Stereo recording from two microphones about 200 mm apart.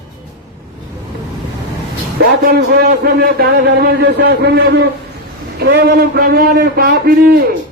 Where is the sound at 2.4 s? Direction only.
50° right (ahead or behind).